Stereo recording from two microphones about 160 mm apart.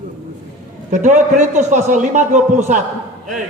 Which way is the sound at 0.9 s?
50° right (ahead or behind).